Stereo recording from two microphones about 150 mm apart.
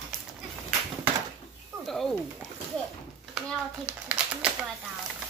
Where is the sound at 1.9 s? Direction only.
Centre (ahead or behind).